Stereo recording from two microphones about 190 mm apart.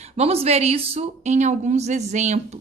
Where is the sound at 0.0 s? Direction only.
35° right (ahead or behind).